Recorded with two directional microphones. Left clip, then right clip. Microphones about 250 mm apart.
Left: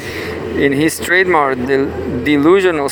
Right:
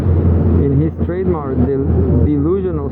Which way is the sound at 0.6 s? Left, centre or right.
Left.